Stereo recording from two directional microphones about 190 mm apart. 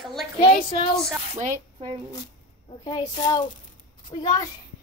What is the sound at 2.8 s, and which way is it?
Speech, 20° left (ahead or behind).